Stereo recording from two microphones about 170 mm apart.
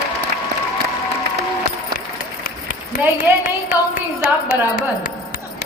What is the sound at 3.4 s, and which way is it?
Carnatic music, 55° left (ahead or behind).